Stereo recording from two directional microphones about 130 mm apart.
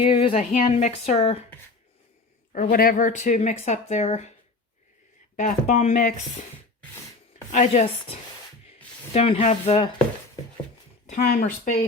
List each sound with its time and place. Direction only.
0.0 s speech: 45° left (ahead or behind)
2.5 s speech: 80° left; by 4.4 s 60° left (ahead or behind)
5.4 s speech: 70° left (ahead or behind)
7.5 s speech: 60° left (ahead or behind)
9.1 s speech: 60° left (ahead or behind)
11.0 s speech: 65° left (ahead or behind); by 11.8 s 80° left